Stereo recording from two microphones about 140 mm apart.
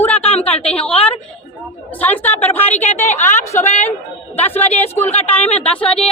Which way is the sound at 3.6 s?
55° left (ahead or behind).